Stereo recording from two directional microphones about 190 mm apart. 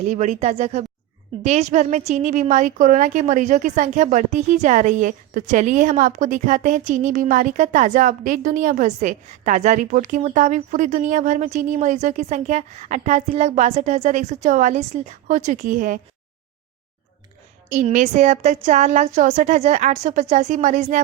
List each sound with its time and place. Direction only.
0.0 s a woman's voice: 40° right (ahead or behind)
17.7 s a woman's voice: 40° right (ahead or behind)